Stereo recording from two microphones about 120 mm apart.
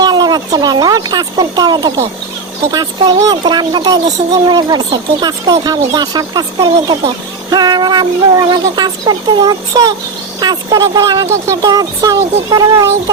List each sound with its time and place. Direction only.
0.0 s speech: 35° right (ahead or behind)